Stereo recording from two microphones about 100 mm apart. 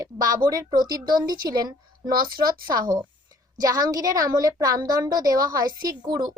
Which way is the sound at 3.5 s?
40° right (ahead or behind).